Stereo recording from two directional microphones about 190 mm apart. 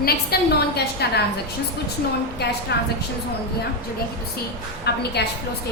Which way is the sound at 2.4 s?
60° left (ahead or behind).